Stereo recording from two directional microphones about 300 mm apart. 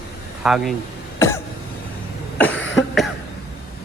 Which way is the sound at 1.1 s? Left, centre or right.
Centre.